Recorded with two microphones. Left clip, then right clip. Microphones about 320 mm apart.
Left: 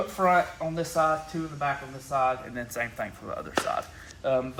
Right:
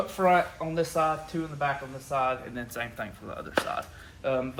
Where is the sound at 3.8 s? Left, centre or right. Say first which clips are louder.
Left 2 dB; centre.